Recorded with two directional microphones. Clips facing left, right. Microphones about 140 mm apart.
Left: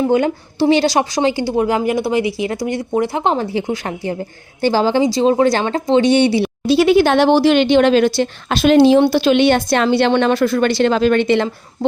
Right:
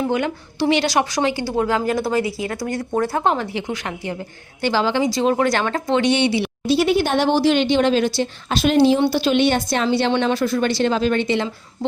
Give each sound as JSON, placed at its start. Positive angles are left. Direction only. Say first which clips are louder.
{"t": 0.1, "sound": "a woman's voice", "louder": "left 6 dB", "side_deg": 30}
{"t": 3.3, "sound": "speech", "louder": "left 5 dB", "side_deg": 35}
{"t": 6.7, "sound": "speech", "louder": "left 6 dB", "side_deg": 90}